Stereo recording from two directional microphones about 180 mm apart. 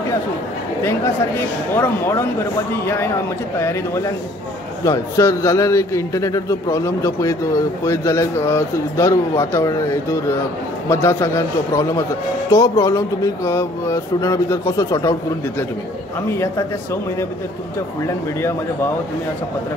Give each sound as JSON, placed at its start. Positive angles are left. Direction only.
{"t": 1.8, "sound": "a man's voice", "side_deg": 15}
{"t": 3.5, "sound": "a man's voice", "side_deg": 15}
{"t": 16.3, "sound": "a man's voice", "side_deg": 15}